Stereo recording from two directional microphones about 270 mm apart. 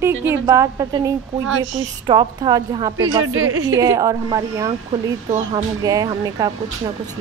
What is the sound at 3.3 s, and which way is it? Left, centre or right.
Speech, right.